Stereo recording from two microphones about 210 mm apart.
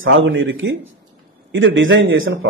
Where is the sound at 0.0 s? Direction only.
65° right (ahead or behind).